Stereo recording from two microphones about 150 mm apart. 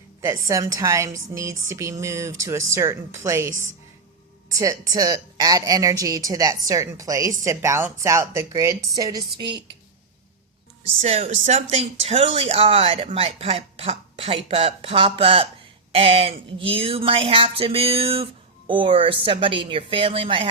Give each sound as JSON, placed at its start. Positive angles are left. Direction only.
{"t": 0.3, "sound": "speech", "side_deg": -20}
{"t": 4.5, "sound": "speech", "side_deg": -20}
{"t": 11.0, "sound": "speech", "side_deg": -45}